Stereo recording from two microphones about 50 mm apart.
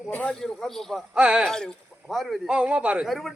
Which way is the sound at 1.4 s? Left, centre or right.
Centre.